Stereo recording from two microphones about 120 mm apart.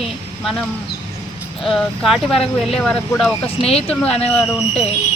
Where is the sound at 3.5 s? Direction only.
55° left (ahead or behind).